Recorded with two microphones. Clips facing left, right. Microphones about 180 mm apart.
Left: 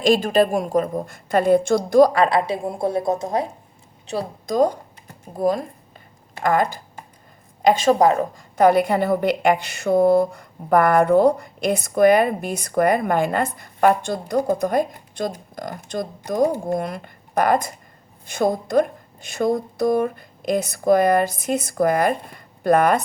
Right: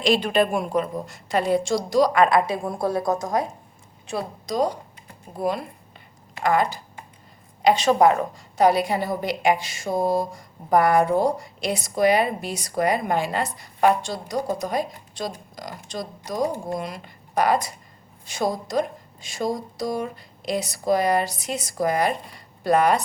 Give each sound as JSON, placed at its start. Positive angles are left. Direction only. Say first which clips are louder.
{"t": 0.0, "sound": "a woman's voice", "louder": "left 3 dB", "side_deg": 45}
{"t": 2.1, "sound": "a woman's voice", "louder": "even", "side_deg": 30}
{"t": 4.4, "sound": "a woman's voice", "louder": "left 6 dB", "side_deg": 50}